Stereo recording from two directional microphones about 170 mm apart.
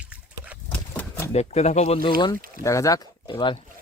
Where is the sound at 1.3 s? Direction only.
40° left (ahead or behind).